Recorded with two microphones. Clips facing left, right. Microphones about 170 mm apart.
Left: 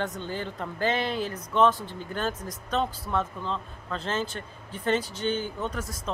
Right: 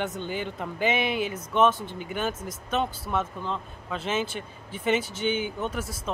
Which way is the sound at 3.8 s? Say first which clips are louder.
Right 2 dB; 5° right (ahead or behind).